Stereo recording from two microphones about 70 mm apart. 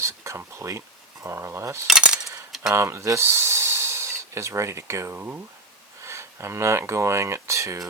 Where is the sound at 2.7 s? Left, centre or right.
Right.